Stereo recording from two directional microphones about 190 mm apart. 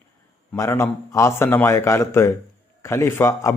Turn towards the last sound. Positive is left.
turn(degrees=15)  # may be behind; listen again after turning